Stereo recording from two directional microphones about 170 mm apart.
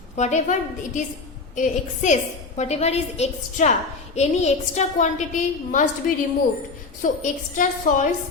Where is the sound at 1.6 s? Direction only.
45° left (ahead or behind).